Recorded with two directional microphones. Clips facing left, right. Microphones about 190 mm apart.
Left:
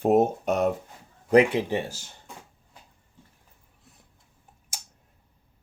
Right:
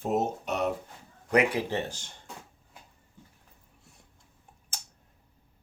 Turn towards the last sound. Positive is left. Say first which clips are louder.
# left 1 dB
turn(degrees=10)  # may be behind; listen again after turning